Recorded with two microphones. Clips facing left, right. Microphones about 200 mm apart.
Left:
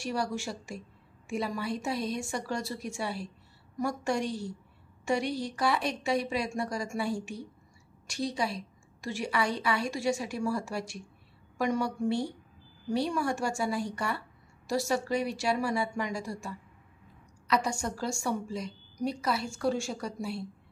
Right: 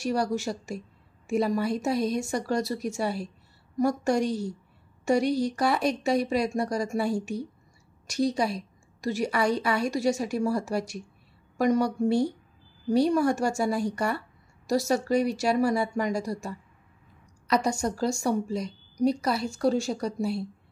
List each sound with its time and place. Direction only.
0.0 s a woman's voice: 40° right (ahead or behind)